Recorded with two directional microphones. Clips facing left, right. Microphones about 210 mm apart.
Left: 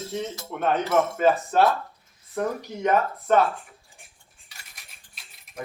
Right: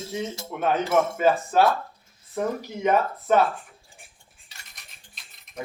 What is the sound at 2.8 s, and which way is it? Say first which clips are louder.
Speech: even; 5° right (ahead or behind).